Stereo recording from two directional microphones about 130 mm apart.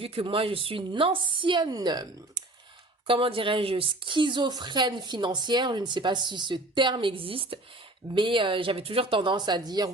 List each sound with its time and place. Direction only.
0.0 s a woman's voice: 45° right (ahead or behind)
3.1 s a woman's voice: 45° right (ahead or behind)